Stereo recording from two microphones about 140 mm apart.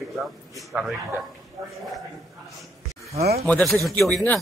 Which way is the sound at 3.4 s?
Centre (ahead or behind).